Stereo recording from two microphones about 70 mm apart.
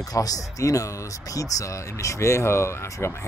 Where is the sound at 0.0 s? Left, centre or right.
Left.